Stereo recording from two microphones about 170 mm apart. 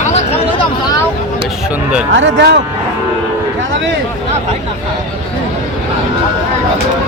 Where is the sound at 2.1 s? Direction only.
90° right.